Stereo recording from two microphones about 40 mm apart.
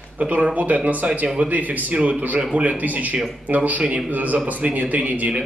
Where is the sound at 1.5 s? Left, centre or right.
Right.